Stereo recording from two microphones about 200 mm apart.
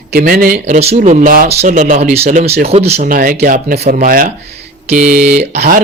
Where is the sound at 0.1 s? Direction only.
45° right (ahead or behind); by 3.1 s 30° right (ahead or behind).